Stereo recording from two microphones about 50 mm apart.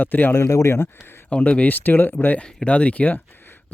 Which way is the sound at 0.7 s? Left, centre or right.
Left.